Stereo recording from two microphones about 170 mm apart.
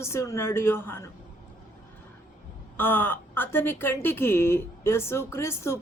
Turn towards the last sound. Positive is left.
turn(degrees=15)  # may be behind; listen again after turning